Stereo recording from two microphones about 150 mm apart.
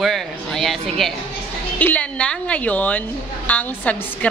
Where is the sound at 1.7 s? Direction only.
10° left (ahead or behind).